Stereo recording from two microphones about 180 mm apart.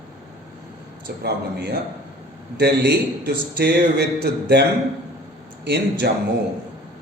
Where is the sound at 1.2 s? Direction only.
65° right (ahead or behind).